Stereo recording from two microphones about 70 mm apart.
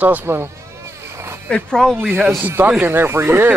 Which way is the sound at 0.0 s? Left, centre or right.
Right.